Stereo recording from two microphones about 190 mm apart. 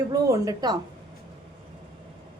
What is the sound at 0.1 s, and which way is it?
Speech, 20° right (ahead or behind).